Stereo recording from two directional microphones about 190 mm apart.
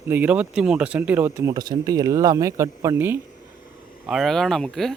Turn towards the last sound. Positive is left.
turn(degrees=0)  # may be behind; listen again after turning